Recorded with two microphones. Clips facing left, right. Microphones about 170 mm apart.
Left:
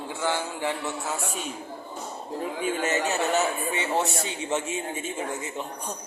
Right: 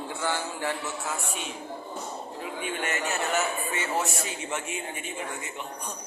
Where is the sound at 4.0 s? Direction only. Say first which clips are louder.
Left 3 dB; 35° left (ahead or behind).